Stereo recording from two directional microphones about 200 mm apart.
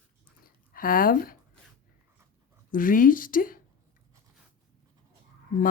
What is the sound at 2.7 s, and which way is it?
Speech, 45° left (ahead or behind).